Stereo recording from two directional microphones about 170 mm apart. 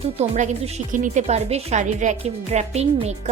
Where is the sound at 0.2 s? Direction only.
40° right (ahead or behind).